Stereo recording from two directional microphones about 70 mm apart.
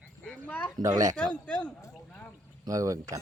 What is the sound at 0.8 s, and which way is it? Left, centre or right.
Speech, right.